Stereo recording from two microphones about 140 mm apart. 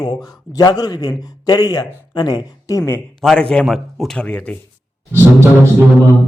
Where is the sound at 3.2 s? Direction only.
5° left (ahead or behind).